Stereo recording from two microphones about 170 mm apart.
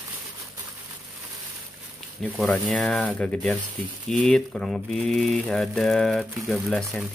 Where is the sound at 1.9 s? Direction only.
5° right (ahead or behind).